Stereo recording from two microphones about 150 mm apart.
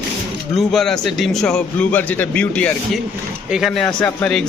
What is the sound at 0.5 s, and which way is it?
A man's voice, centre (ahead or behind).